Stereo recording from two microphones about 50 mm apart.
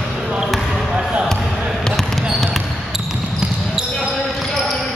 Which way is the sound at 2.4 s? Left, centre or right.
Centre.